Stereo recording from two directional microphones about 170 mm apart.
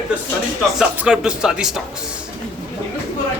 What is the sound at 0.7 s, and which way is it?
A man's voice, 5° right (ahead or behind).